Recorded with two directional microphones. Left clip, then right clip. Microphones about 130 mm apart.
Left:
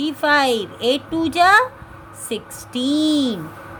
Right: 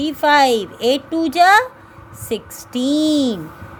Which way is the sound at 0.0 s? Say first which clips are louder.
Right 3 dB; 35° right (ahead or behind).